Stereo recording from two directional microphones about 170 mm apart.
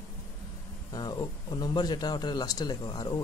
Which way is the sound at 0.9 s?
25° left (ahead or behind).